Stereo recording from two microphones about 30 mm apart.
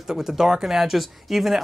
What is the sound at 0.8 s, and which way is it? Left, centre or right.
Speech, centre.